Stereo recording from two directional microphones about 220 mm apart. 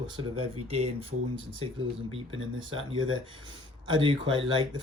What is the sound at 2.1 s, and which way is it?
Speech, 25° right (ahead or behind).